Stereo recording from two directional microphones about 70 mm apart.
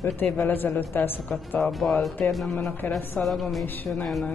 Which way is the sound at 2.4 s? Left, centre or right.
Centre.